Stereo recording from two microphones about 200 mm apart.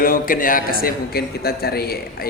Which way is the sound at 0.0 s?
45° left (ahead or behind).